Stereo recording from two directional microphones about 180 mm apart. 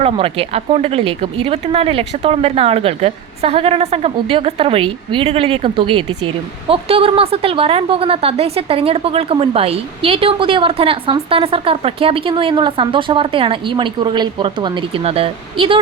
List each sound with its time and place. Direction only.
0.0 s speech: 35° right (ahead or behind)